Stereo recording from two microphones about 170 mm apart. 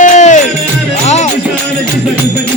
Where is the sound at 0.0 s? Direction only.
45° left (ahead or behind).